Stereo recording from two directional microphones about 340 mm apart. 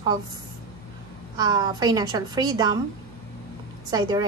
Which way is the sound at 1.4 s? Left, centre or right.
Centre.